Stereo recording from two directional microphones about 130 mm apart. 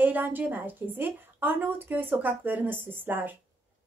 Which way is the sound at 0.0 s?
15° right (ahead or behind).